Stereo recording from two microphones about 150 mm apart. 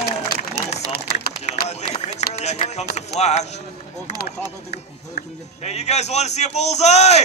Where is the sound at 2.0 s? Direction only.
45° left (ahead or behind).